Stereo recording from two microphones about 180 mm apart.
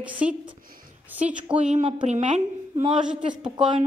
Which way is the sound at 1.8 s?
30° right (ahead or behind).